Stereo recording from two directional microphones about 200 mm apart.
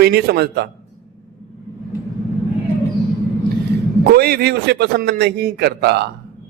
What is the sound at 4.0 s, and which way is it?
A man's voice, 50° right (ahead or behind).